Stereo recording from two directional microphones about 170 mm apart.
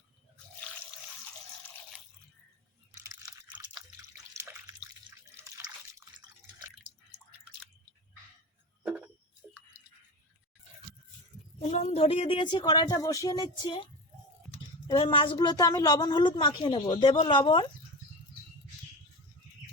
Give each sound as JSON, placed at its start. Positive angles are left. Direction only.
{"t": 2.9, "sound": "a sound", "side_deg": -20}
{"t": 4.4, "sound": "drip", "side_deg": -20}
{"t": 5.5, "sound": "water", "side_deg": -15}
{"t": 8.8, "sound": "a sound", "side_deg": -10}
{"t": 11.6, "sound": "a woman's voice", "side_deg": 40}
{"t": 14.8, "sound": "a woman's voice", "side_deg": 30}